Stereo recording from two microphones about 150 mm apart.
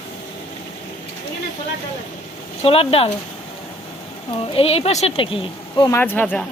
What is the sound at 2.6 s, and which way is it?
Speech, 40° left (ahead or behind).